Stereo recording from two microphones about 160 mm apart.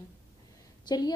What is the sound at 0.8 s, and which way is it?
Speech, 25° left (ahead or behind).